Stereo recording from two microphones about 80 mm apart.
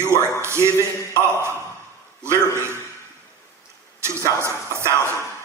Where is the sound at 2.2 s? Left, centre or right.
Right.